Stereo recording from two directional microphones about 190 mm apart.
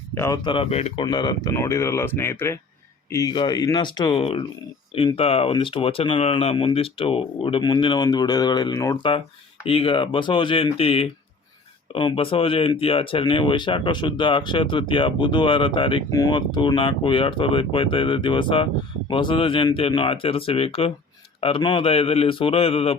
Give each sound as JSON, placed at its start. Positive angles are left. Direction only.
{"t": 0.1, "sound": "speech", "side_deg": 15}
{"t": 0.4, "sound": "speech", "side_deg": 30}
{"t": 1.0, "sound": "speech", "side_deg": 20}
{"t": 9.6, "sound": "a man's voice", "side_deg": 30}